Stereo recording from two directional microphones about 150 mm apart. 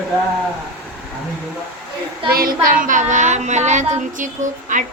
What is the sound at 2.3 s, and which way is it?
Speech, 70° right (ahead or behind).